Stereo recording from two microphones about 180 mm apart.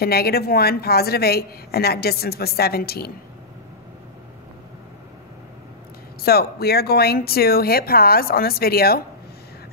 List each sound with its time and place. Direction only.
0.0 s a woman's voice: 60° left (ahead or behind)
6.2 s a woman's voice: 60° left (ahead or behind)